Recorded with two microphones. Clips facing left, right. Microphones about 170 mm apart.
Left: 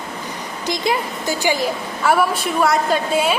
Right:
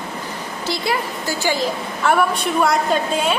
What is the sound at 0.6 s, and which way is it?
A woman's voice, 15° left (ahead or behind).